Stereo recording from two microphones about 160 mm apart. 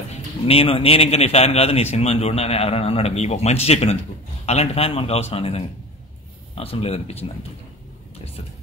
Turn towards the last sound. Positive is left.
turn(degrees=40)  # may be behind; listen again after turning